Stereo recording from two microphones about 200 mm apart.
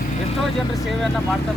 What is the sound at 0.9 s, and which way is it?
Speech, centre (ahead or behind).